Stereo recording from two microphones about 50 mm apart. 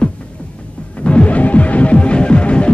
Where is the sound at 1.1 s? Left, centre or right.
Left.